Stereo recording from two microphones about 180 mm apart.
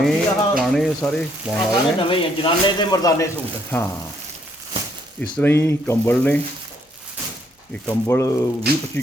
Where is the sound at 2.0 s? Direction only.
30° left (ahead or behind); by 3.8 s 15° left (ahead or behind).